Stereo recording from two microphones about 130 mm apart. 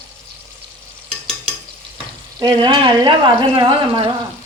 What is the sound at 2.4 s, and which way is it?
Speech, 40° right (ahead or behind).